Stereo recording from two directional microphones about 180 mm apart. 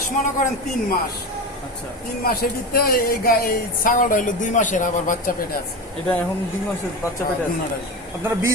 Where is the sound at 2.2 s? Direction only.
55° left (ahead or behind).